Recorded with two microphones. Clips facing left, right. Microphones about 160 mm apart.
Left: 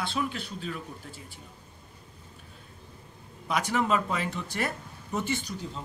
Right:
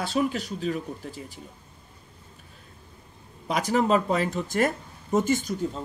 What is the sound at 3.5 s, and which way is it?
Speech, 35° right (ahead or behind).